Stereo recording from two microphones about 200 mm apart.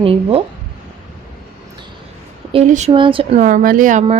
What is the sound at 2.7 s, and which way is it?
Speech, 35° right (ahead or behind).